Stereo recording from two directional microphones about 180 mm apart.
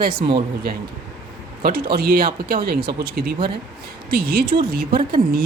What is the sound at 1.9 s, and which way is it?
Speech, 55° right (ahead or behind).